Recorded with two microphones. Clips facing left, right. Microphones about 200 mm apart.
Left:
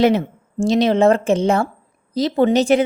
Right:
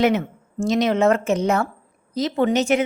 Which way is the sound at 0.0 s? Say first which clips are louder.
Left 3 dB; 35° left (ahead or behind).